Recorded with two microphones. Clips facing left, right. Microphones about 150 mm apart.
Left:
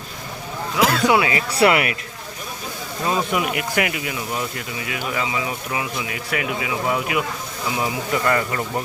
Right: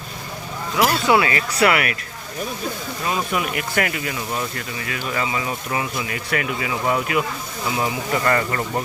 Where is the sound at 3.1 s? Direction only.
15° left (ahead or behind).